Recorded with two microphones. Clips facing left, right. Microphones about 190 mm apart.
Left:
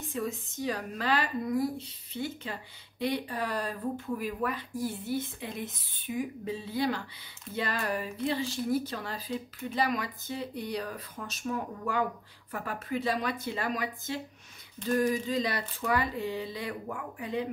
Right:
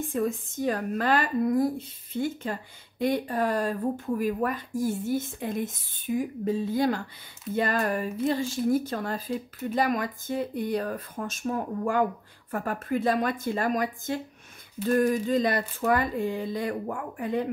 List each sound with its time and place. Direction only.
0.1 s a woman's voice: 50° right (ahead or behind)